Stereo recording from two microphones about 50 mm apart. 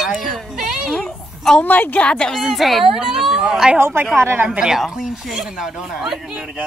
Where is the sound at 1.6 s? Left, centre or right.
Left.